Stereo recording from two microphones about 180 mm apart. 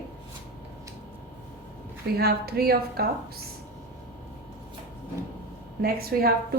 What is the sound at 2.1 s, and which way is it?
Speech, 60° right (ahead or behind).